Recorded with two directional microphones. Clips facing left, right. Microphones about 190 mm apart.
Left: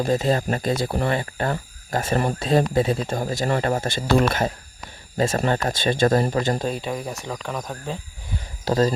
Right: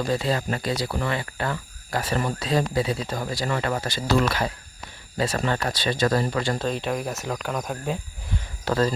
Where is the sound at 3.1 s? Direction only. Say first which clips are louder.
Left 4 dB; 25° left (ahead or behind).